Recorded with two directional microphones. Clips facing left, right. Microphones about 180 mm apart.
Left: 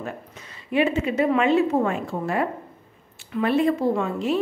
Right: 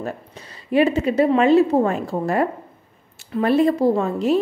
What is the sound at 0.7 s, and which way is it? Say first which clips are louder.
Speech: right 4 dB; 35° right (ahead or behind).